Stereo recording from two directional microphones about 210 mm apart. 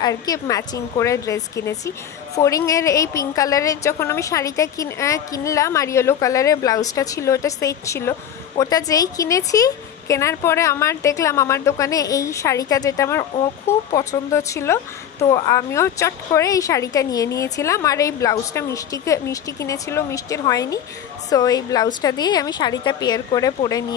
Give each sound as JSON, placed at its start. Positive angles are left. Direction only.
{"t": 0.0, "sound": "a woman's voice", "side_deg": 15}